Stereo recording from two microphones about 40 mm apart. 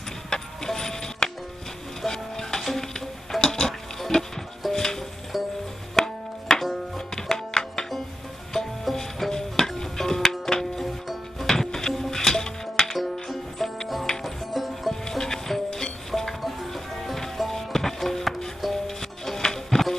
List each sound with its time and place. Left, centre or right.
0.3 s music: centre
2.9 s a sound: centre
4.7 s music: centre
7.2 s music: centre
11.5 s music: centre
12.9 s music: centre
15.0 s music: centre